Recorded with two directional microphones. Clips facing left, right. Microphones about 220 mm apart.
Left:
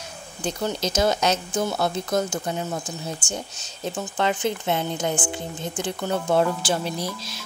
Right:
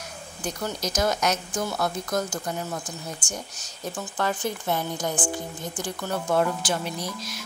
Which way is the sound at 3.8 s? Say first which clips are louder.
Left 3 dB; 20° left (ahead or behind).